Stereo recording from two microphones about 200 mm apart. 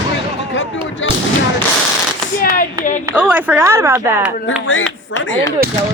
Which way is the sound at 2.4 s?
40° left (ahead or behind).